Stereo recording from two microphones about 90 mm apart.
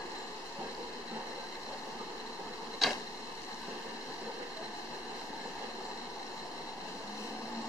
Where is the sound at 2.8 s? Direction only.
Centre (ahead or behind).